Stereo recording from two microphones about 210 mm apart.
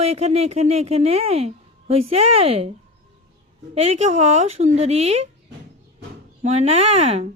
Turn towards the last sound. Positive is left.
turn(degrees=-30)  # may be behind; listen again after turning